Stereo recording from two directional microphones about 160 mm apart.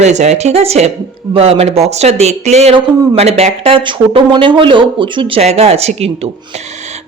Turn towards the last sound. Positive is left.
turn(degrees=-40)  # may be behind; listen again after turning